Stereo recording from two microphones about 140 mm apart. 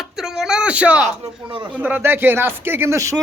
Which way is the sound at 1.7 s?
10° right (ahead or behind).